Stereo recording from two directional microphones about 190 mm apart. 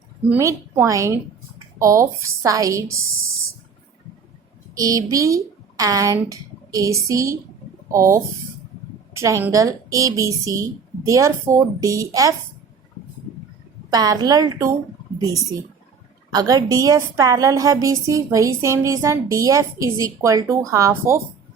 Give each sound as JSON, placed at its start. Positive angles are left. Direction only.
{"t": 0.3, "sound": "a woman's voice", "side_deg": -15}
{"t": 4.7, "sound": "a woman's voice", "side_deg": -20}
{"t": 13.9, "sound": "a woman's voice", "side_deg": -20}
{"t": 16.3, "sound": "a woman's voice", "side_deg": -20}